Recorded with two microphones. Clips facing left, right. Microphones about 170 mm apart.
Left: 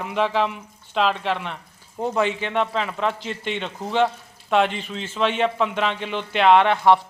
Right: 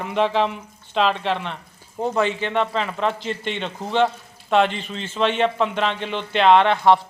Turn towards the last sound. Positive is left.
turn(degrees=10)  # may be behind; listen again after turning